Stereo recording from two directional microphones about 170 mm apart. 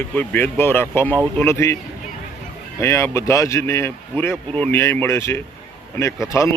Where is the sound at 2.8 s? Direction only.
15° left (ahead or behind).